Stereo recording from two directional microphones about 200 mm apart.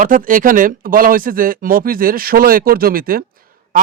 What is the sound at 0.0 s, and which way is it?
Speech, 40° right (ahead or behind).